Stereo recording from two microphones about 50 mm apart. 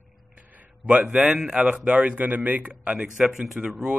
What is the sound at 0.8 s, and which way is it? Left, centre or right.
Speech, centre.